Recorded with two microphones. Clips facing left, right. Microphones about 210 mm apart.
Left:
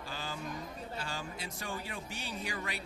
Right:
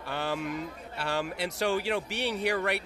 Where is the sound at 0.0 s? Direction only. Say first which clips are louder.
Right 9 dB; 65° right (ahead or behind).